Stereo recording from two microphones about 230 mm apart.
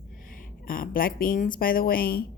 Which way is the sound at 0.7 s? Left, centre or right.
Left.